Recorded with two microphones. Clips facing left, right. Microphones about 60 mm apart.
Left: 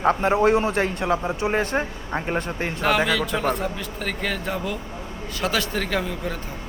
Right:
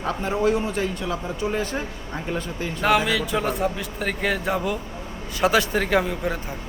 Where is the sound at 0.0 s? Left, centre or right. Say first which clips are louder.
Left 4 dB; left.